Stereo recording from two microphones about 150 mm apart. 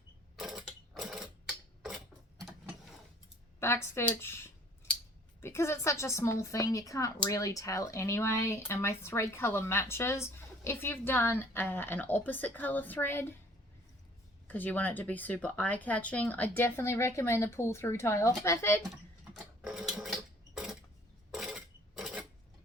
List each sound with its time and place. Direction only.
0.3 s sewing machine: 5° right (ahead or behind)
3.6 s a woman's voice: 15° left (ahead or behind)
14.4 s a woman's voice: 10° left (ahead or behind)
19.3 s a sound: 5° right (ahead or behind)